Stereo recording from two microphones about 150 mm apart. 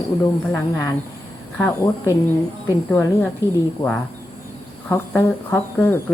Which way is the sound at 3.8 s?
30° left (ahead or behind).